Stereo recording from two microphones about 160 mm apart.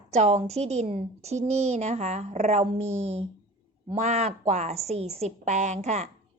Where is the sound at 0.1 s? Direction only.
40° right (ahead or behind).